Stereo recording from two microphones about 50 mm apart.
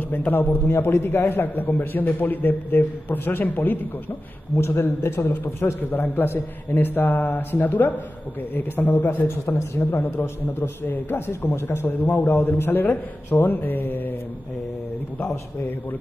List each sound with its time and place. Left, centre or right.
0.1 s a man's voice: left
4.6 s a man's voice: left
9.8 s a man's voice: left